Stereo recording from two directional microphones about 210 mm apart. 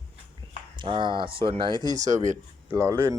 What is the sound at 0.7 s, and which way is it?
Speech, 20° right (ahead or behind).